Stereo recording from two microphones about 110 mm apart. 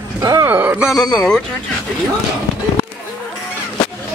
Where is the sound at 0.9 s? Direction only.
35° left (ahead or behind).